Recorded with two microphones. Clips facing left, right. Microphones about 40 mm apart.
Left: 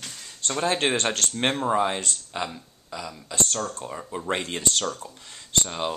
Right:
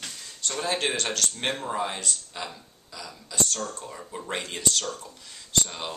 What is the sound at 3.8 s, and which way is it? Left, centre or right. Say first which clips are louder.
Speech: left 4 dB; left.